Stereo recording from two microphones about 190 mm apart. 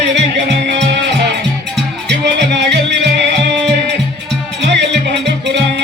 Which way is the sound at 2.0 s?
65° right (ahead or behind).